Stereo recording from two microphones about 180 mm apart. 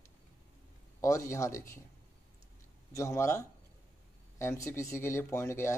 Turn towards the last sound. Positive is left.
turn(degrees=15)  # may be behind; listen again after turning